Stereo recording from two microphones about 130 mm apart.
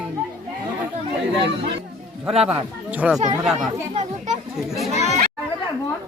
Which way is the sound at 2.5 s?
10° right (ahead or behind).